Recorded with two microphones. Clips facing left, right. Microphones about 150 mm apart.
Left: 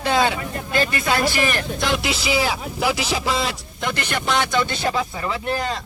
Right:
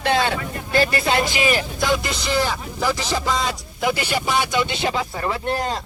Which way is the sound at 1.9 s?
5° left (ahead or behind).